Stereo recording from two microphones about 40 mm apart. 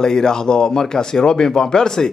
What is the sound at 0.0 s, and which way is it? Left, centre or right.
Speech, centre.